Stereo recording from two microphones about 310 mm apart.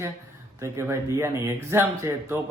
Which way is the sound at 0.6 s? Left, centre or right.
Centre.